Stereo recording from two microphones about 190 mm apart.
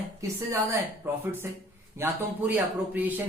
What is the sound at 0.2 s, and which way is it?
Speech, 15° right (ahead or behind).